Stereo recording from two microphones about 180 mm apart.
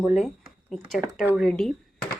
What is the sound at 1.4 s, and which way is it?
Speech, 5° left (ahead or behind).